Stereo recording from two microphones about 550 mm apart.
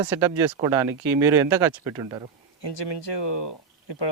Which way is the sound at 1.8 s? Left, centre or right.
Centre.